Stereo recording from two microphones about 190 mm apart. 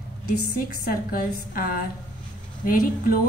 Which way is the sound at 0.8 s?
50° left (ahead or behind).